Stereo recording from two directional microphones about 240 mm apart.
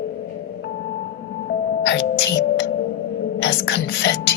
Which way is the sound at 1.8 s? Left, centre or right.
Left.